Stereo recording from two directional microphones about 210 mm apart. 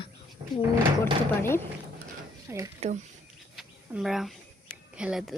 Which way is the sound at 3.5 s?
Centre (ahead or behind).